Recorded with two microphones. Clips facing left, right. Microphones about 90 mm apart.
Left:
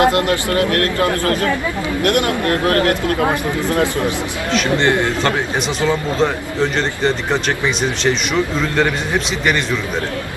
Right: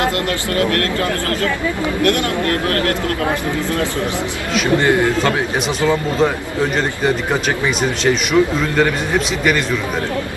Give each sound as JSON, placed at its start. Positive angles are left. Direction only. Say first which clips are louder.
{"t": 0.0, "sound": "speech", "louder": "left 4 dB", "side_deg": 20}
{"t": 4.5, "sound": "a man's voice", "louder": "right 1 dB", "side_deg": -5}